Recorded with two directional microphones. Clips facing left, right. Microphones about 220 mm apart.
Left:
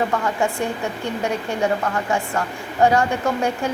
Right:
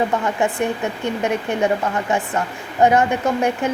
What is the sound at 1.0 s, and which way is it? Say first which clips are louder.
A woman's voice: right 3 dB; 20° right (ahead or behind).